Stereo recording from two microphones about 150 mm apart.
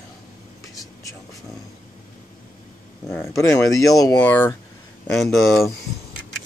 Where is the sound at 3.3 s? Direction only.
20° left (ahead or behind).